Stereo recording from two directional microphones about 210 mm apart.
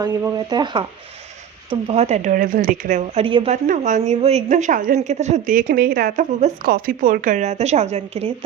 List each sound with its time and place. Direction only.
0.0 s a woman's voice: 15° right (ahead or behind); by 5.6 s 35° right (ahead or behind)
5.6 s a woman's voice: 50° right (ahead or behind); by 8.3 s 30° right (ahead or behind)